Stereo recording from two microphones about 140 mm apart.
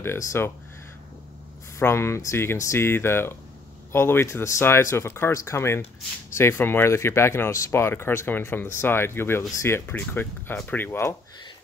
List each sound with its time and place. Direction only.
0.3 s speech: 15° left (ahead or behind)
1.8 s speech: 20° left (ahead or behind)